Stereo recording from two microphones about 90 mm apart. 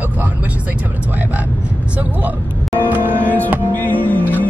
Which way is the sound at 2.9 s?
20° right (ahead or behind).